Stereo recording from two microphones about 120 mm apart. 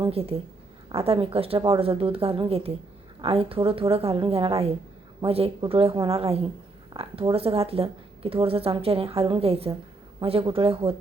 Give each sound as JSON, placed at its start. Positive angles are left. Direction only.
{"t": 0.0, "sound": "a woman's voice", "side_deg": -55}